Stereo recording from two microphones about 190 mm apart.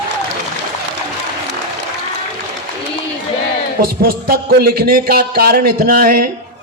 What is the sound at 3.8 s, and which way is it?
A man's voice, 50° right (ahead or behind).